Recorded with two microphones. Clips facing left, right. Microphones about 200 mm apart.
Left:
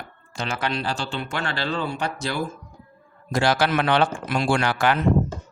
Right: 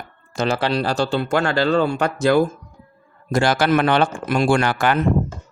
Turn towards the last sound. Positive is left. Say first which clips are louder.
# right 3 dB
turn(degrees=-50)  # may be behind; listen again after turning